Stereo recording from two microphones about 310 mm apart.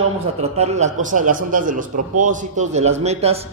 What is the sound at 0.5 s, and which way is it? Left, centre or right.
Speech, right.